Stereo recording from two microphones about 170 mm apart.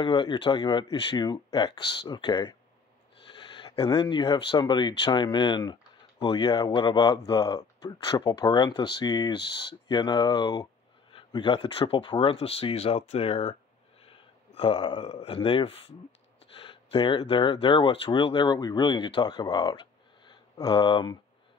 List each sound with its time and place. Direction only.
0.0 s speech: 25° left (ahead or behind)
14.6 s speech: 30° left (ahead or behind)